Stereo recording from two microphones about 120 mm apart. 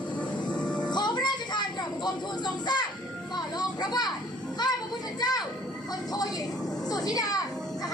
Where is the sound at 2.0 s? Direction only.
35° left (ahead or behind).